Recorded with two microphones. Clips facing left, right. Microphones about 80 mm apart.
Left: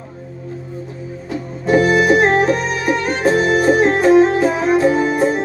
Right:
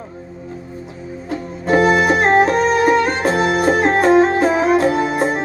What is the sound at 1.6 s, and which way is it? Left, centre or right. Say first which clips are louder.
Music: even; right.